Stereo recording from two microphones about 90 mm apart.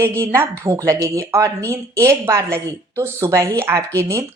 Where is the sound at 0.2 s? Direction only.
25° right (ahead or behind).